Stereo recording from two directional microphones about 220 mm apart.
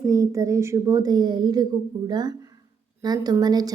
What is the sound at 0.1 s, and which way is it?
A woman's voice, 15° right (ahead or behind).